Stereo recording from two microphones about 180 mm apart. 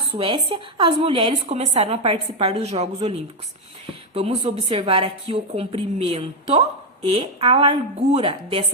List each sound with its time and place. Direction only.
0.1 s a woman's voice: 30° right (ahead or behind)